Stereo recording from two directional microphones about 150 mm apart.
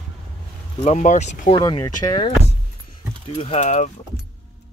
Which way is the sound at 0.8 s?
50° left (ahead or behind).